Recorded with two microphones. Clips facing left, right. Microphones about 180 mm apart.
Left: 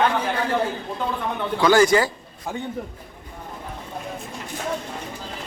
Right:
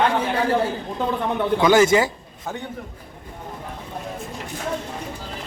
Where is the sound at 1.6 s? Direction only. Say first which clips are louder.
Even; 20° right (ahead or behind).